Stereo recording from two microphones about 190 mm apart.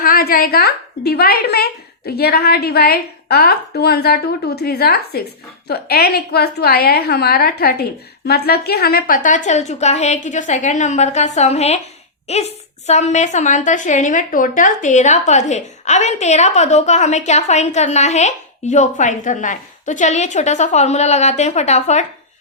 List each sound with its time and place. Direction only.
0.0 s a woman's voice: 50° left (ahead or behind)